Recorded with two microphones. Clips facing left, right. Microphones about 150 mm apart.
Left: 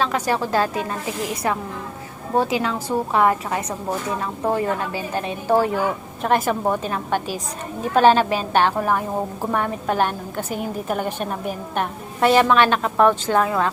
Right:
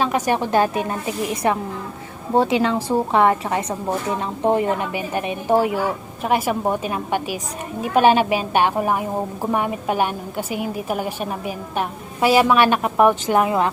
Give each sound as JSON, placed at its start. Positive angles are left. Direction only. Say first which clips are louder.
{"t": 0.0, "sound": "a woman's voice", "louder": "right 2 dB", "side_deg": -15}